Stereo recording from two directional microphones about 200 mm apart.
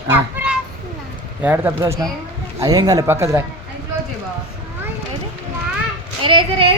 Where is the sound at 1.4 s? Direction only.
10° right (ahead or behind).